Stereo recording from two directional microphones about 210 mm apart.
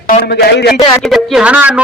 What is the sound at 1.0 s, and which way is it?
Speech, centre (ahead or behind).